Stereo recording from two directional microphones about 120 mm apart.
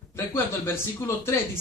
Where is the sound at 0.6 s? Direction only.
20° left (ahead or behind).